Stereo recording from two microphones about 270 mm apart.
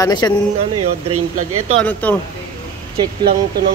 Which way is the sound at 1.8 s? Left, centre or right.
Centre.